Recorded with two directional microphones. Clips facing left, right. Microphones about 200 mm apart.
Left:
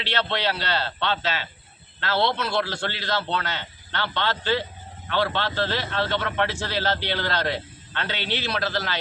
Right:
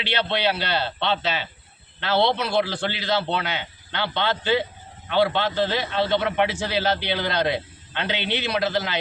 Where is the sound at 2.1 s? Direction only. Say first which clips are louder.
Right 3 dB; 15° right (ahead or behind).